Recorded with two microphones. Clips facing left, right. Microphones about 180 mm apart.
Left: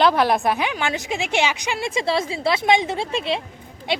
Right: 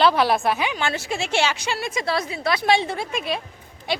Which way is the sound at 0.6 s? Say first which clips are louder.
Left 1 dB; 15° left (ahead or behind).